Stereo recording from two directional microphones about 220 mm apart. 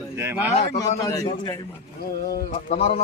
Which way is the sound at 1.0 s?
20° left (ahead or behind).